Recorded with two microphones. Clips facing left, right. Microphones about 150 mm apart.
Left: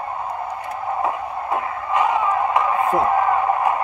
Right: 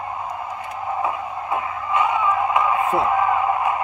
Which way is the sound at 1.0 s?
40° left (ahead or behind).